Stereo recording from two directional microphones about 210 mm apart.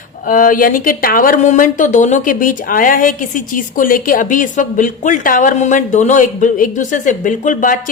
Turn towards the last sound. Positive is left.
turn(degrees=40)  # may be behind; listen again after turning